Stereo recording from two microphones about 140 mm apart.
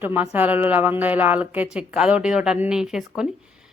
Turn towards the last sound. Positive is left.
turn(degrees=-5)  # may be behind; listen again after turning